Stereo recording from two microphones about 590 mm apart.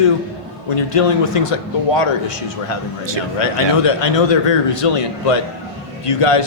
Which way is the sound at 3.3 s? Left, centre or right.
Left.